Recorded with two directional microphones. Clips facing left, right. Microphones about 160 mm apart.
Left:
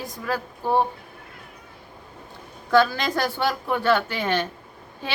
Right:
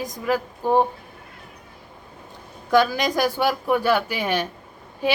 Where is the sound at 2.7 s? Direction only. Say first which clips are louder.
Right 1 dB; 15° right (ahead or behind).